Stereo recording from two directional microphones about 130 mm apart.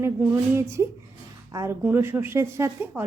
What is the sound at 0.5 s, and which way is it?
A woman's voice, 20° right (ahead or behind).